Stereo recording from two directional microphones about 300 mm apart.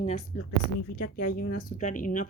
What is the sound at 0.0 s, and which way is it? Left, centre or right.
A woman's voice, left.